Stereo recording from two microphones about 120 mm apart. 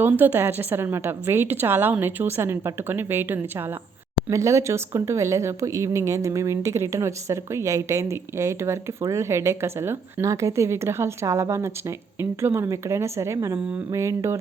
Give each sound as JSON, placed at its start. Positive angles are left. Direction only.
{"t": 0.0, "sound": "speech", "side_deg": -15}